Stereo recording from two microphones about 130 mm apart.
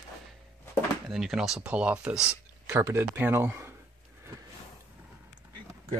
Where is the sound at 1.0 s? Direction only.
Centre (ahead or behind).